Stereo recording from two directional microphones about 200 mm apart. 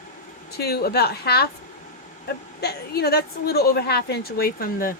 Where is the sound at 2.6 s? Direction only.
55° left (ahead or behind).